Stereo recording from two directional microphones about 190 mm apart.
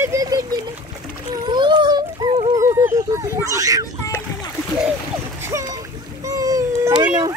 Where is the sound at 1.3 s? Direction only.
25° right (ahead or behind).